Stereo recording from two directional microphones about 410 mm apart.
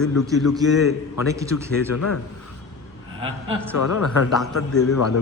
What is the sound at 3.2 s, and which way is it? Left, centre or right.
Speech, centre.